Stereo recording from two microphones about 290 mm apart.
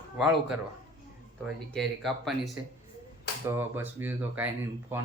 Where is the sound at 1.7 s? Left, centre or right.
Centre.